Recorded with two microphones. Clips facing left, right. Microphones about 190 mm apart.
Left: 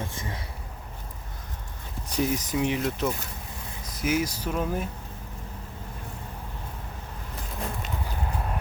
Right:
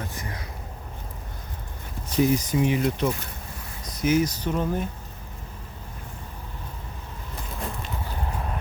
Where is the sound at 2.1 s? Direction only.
Centre (ahead or behind).